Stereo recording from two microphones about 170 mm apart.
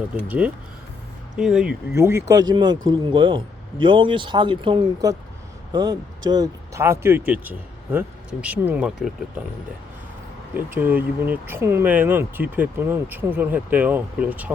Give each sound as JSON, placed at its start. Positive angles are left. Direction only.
{"t": 0.3, "sound": "speech", "side_deg": -10}
{"t": 1.9, "sound": "speech", "side_deg": -15}
{"t": 10.8, "sound": "speech", "side_deg": -10}